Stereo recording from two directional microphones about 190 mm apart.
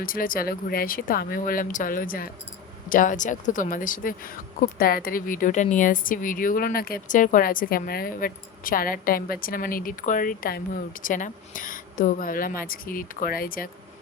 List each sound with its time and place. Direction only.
0.0 s speech: 50° left (ahead or behind)